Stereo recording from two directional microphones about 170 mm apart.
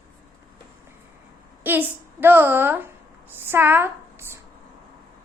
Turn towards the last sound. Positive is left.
turn(degrees=-15)  # may be behind; listen again after turning